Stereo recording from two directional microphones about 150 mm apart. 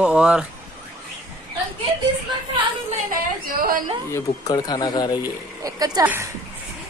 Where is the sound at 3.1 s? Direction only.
70° right (ahead or behind).